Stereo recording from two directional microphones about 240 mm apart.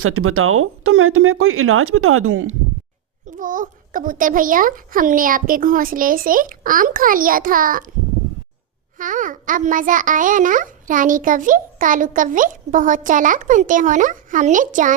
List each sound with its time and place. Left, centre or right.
0.0 s speech: right
3.2 s a child's voice: right
9.0 s a child's voice: right